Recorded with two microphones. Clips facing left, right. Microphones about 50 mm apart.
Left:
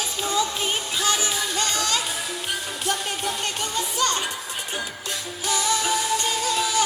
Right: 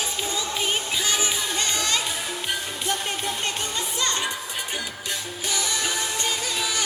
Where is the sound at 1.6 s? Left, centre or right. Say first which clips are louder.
Left 3 dB; right.